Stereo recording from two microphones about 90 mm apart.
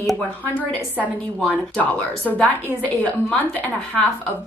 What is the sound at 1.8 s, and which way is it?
A woman's voice, 20° left (ahead or behind).